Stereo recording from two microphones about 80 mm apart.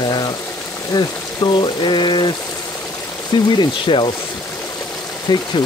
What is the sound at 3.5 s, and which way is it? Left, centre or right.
Speech, left.